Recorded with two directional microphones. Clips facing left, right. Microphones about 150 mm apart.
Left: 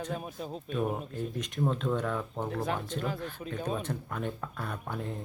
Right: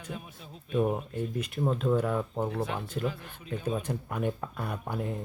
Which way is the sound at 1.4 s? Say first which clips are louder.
Right 1 dB; 5° right (ahead or behind).